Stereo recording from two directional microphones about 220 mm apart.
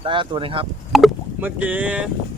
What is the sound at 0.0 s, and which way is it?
Speech, 20° right (ahead or behind).